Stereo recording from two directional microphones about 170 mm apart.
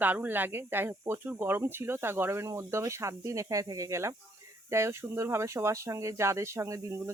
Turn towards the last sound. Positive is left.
turn(degrees=-15)  # may be behind; listen again after turning